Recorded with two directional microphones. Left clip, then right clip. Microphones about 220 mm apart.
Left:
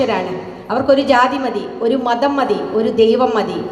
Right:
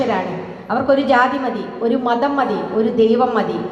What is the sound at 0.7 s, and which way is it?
A woman's voice, 45° left (ahead or behind).